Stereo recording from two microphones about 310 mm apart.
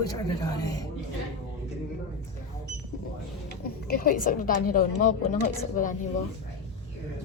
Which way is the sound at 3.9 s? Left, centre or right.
Left.